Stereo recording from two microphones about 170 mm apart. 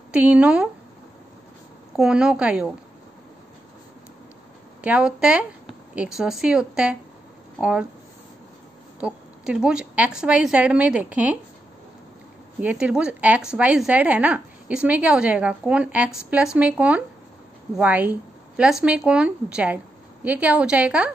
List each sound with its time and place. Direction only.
0.1 s a woman's voice: 5° right (ahead or behind)
2.0 s a woman's voice: 5° right (ahead or behind)
4.8 s a woman's voice: 5° right (ahead or behind)
9.0 s a woman's voice: 5° right (ahead or behind)
12.5 s a woman's voice: 10° right (ahead or behind)